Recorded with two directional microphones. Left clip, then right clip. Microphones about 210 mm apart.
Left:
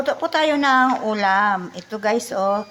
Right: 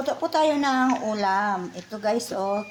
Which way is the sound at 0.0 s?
10° left (ahead or behind).